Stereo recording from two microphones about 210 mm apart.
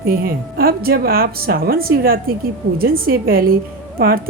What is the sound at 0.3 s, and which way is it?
A woman's voice, 45° right (ahead or behind).